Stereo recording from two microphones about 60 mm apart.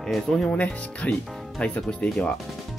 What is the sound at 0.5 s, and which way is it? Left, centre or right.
Speech, centre.